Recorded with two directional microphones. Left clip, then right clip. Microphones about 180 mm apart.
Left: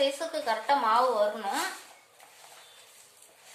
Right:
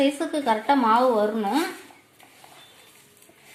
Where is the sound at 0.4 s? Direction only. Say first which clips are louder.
Right 5 dB; 50° right (ahead or behind).